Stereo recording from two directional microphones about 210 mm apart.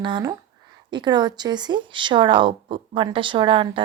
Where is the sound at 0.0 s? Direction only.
20° right (ahead or behind).